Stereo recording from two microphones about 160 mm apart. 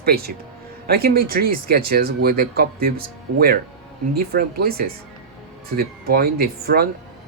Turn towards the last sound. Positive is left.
turn(degrees=-75)  # may be behind; listen again after turning